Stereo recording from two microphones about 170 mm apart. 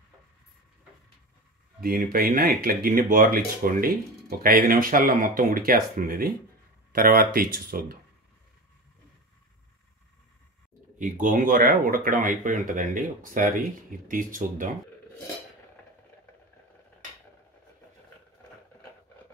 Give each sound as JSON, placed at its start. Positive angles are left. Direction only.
{"t": 1.8, "sound": "speech", "side_deg": -60}
{"t": 11.0, "sound": "speech", "side_deg": -50}